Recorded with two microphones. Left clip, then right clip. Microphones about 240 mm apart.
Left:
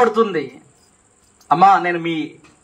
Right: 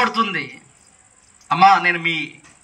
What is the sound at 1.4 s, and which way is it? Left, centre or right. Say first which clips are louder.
Speech: left 1 dB; left.